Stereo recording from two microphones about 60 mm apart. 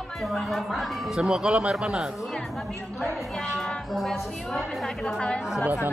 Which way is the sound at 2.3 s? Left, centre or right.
Centre.